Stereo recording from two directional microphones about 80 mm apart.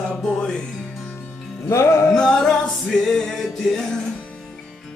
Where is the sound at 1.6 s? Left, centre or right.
Left.